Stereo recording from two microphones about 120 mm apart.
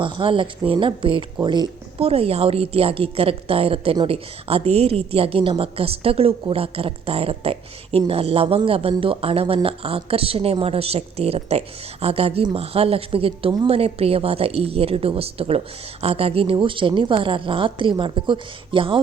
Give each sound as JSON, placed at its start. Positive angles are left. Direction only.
{"t": 0.0, "sound": "a woman's voice", "side_deg": -45}
{"t": 2.0, "sound": "a woman's voice", "side_deg": -55}